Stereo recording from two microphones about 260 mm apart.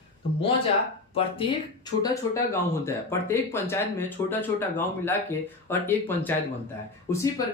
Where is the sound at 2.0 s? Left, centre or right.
Centre.